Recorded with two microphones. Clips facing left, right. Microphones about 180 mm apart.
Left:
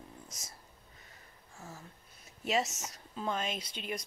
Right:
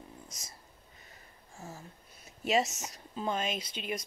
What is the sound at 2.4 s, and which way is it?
Speech, 15° right (ahead or behind).